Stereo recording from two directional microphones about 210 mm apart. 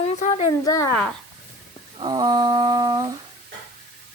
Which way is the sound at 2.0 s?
20° right (ahead or behind).